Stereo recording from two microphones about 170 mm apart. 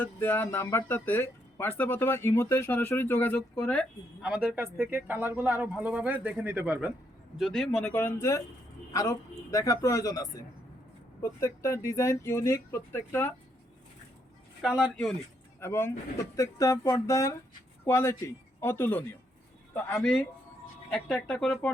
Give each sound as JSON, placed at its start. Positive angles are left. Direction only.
{"t": 0.0, "sound": "speech", "side_deg": 10}
{"t": 4.3, "sound": "a man's voice", "side_deg": -5}
{"t": 14.6, "sound": "speech", "side_deg": -5}
{"t": 15.6, "sound": "a man's voice", "side_deg": 15}